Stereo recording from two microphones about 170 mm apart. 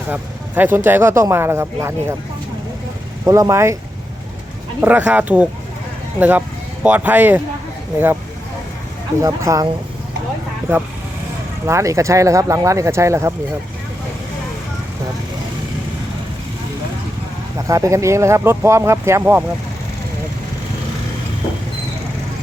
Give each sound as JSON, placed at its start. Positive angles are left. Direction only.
{"t": 0.1, "sound": "speech", "side_deg": -10}
{"t": 3.2, "sound": "speech", "side_deg": -20}
{"t": 4.8, "sound": "speech", "side_deg": -10}
{"t": 9.2, "sound": "speech", "side_deg": -20}
{"t": 11.6, "sound": "speech", "side_deg": -20}
{"t": 17.7, "sound": "speech", "side_deg": -20}